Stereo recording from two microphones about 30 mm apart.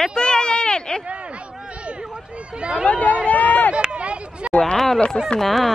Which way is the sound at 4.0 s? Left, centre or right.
Right.